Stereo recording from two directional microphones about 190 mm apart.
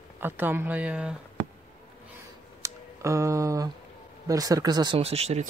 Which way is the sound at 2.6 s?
15° right (ahead or behind).